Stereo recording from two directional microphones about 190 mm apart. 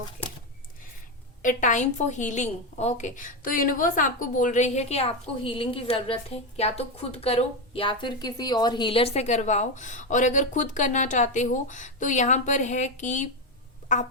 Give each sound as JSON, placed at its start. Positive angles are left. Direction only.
{"t": 1.4, "sound": "a woman's voice", "side_deg": 40}